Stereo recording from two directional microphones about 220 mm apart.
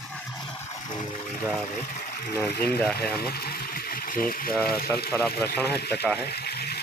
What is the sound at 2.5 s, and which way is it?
Speech, 45° left (ahead or behind).